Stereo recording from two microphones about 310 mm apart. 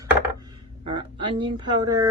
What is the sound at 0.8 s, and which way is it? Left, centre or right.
Speech, centre.